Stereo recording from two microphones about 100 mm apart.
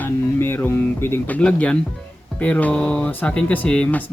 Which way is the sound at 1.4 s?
10° left (ahead or behind).